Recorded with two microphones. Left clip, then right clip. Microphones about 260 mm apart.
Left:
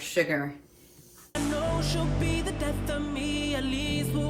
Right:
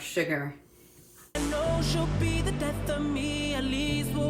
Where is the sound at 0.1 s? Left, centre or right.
Left.